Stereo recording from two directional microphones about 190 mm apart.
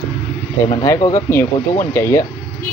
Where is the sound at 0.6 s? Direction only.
15° left (ahead or behind).